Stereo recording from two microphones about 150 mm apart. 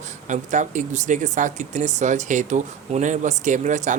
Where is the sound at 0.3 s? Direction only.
55° right (ahead or behind).